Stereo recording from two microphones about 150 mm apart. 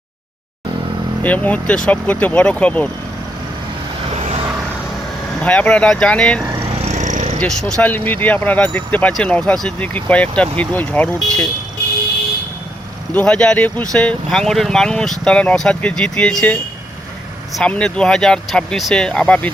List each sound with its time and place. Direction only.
1.2 s speech: 10° left (ahead or behind)
5.4 s speech: 10° left (ahead or behind)
6.8 s a sound: 55° right (ahead or behind)
7.3 s speech: 5° left (ahead or behind)
13.1 s speech: 5° left (ahead or behind)